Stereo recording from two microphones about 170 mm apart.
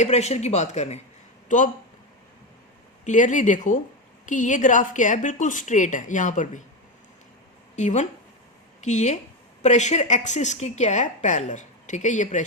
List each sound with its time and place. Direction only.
0.0 s speech: 40° left (ahead or behind)
3.0 s a woman's voice: 45° left (ahead or behind)
7.8 s a woman's voice: 45° left (ahead or behind)